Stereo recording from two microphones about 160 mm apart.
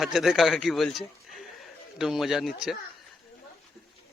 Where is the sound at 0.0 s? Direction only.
Centre (ahead or behind).